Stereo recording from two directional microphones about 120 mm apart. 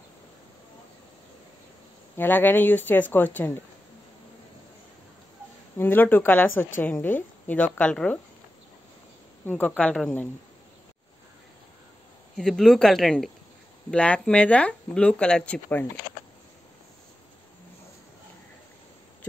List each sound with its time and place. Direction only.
2.1 s speech: 15° left (ahead or behind)
5.8 s speech: 15° left (ahead or behind)
9.5 s speech: 15° left (ahead or behind)
12.4 s speech: 5° left (ahead or behind)